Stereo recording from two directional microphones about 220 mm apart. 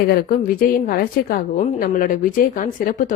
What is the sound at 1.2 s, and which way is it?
A woman's voice, 40° left (ahead or behind).